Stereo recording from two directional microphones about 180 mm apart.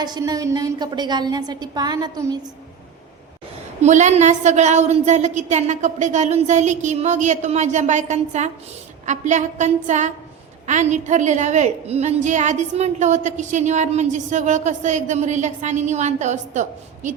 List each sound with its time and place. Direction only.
0.0 s a woman's voice: 20° right (ahead or behind)
3.8 s a woman's voice: 40° right (ahead or behind)